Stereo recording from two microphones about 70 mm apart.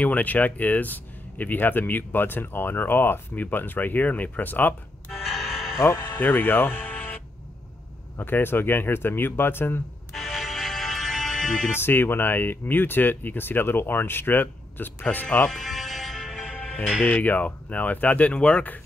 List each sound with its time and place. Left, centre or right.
0.0 s speech: left
5.2 s music: centre
5.8 s speech: left
8.2 s speech: left
10.1 s music: centre
11.7 s speech: left
15.2 s speech: centre
15.5 s music: centre
17.0 s speech: left